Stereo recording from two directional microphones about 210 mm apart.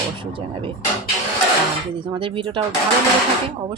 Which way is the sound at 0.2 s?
25° right (ahead or behind).